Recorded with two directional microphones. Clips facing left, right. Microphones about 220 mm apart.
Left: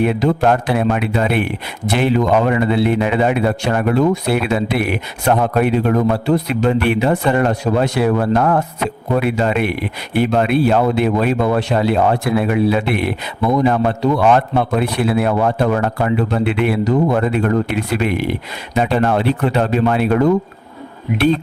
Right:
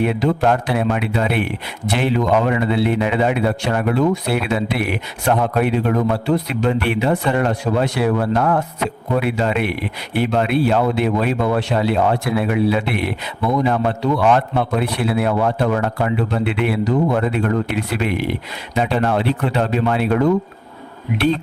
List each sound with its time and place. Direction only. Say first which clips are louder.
0.0 s speech: left 2 dB; 45° left (ahead or behind)